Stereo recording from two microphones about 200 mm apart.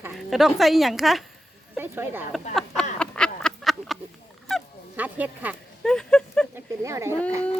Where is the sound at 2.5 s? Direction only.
5° left (ahead or behind).